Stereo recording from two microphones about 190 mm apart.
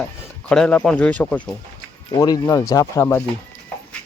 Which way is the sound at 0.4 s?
5° left (ahead or behind).